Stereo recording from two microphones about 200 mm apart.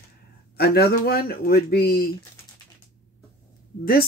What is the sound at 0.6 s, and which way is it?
Speech, 50° left (ahead or behind).